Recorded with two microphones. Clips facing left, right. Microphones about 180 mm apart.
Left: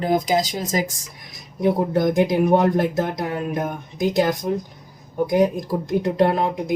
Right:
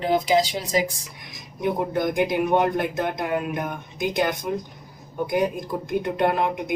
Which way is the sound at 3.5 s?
40° left (ahead or behind).